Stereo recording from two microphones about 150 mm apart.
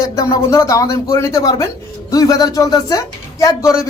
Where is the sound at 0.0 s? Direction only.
20° left (ahead or behind).